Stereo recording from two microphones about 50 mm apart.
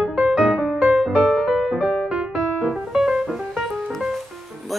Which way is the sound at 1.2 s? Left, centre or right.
Centre.